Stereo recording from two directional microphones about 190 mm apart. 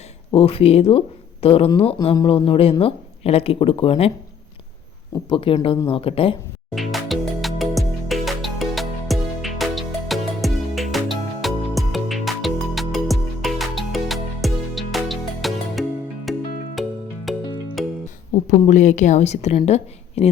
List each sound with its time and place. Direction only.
0.3 s speech: 30° left (ahead or behind)
5.3 s speech: 25° left (ahead or behind)
6.7 s music: centre (ahead or behind)
18.4 s a woman's voice: 40° left (ahead or behind)